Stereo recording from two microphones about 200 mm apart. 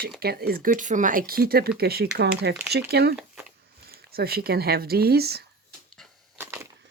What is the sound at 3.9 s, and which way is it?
Speech, 50° right (ahead or behind).